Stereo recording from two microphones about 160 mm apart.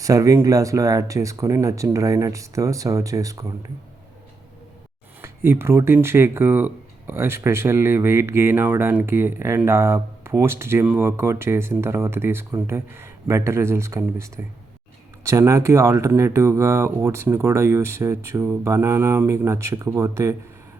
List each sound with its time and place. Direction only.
0.0 s speech: 20° right (ahead or behind)
5.2 s speech: 15° right (ahead or behind)